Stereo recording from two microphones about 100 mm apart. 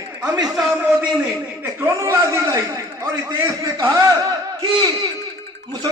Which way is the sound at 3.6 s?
45° right (ahead or behind).